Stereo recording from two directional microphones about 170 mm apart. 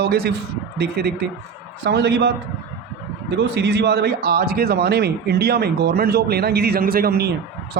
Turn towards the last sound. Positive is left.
turn(degrees=-65)  # may be behind; listen again after turning